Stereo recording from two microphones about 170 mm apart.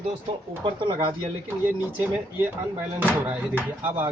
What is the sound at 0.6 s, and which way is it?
Speech, 30° right (ahead or behind).